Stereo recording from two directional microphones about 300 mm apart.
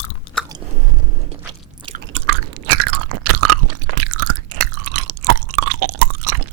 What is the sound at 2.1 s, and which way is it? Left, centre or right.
Chewing, right.